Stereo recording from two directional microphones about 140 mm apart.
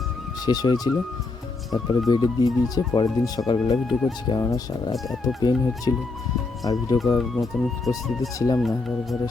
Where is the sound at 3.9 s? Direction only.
Centre (ahead or behind).